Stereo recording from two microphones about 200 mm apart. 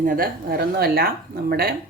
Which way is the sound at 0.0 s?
45° right (ahead or behind).